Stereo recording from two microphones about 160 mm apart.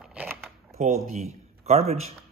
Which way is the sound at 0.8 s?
45° right (ahead or behind).